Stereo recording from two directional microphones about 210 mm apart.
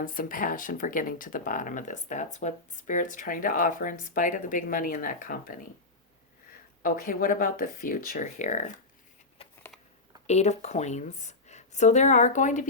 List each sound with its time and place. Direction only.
0.0 s speech: 40° left (ahead or behind)
6.8 s speech: 40° left (ahead or behind)
10.2 s speech: 30° left (ahead or behind)